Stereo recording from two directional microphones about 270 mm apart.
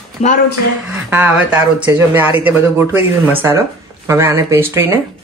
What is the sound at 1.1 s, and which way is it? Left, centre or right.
Speech, centre.